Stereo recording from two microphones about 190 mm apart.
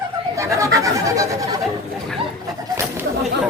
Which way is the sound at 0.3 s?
15° right (ahead or behind).